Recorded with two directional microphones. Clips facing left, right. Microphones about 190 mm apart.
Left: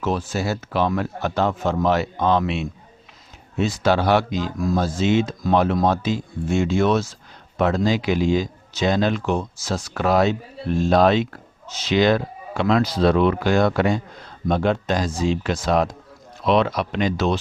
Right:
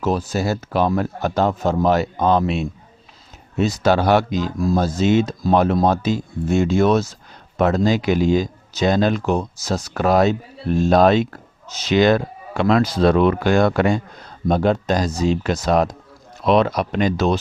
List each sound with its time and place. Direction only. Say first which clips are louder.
0.0 s speech: right 3 dB; 40° right (ahead or behind)
14.4 s speech: right 3 dB; 40° right (ahead or behind)